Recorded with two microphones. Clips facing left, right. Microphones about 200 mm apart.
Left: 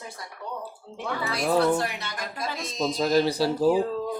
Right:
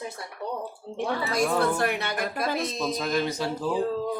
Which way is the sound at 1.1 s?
45° right (ahead or behind).